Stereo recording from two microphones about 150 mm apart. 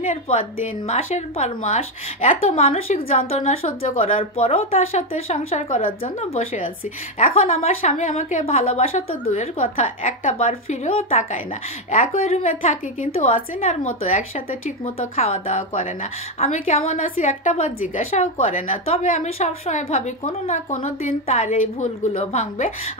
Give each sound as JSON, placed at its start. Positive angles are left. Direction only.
{"t": 0.0, "sound": "a woman's voice", "side_deg": 55}
{"t": 5.8, "sound": "speech", "side_deg": 65}
{"t": 6.1, "sound": "a woman's voice", "side_deg": 45}